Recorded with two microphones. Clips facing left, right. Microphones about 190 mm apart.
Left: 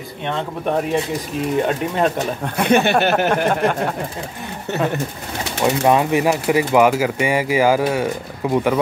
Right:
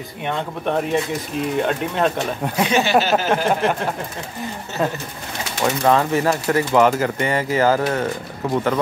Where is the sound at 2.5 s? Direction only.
55° left (ahead or behind).